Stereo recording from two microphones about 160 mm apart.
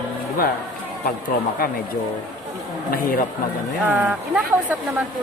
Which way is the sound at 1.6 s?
65° left (ahead or behind).